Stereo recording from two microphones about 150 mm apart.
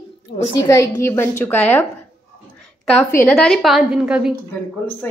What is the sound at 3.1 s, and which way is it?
Speech, 15° left (ahead or behind).